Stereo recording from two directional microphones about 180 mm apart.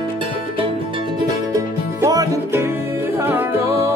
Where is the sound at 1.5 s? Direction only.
20° right (ahead or behind).